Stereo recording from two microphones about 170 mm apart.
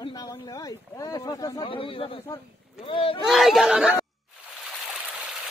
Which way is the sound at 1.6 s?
30° left (ahead or behind).